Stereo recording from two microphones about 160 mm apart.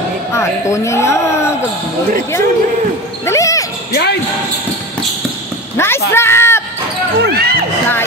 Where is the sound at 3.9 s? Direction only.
90° left.